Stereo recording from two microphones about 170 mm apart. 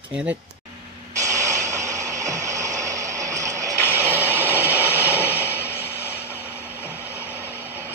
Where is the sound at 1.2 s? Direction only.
20° right (ahead or behind).